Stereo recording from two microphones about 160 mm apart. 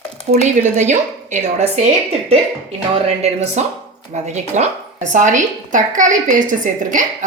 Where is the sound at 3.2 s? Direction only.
45° right (ahead or behind).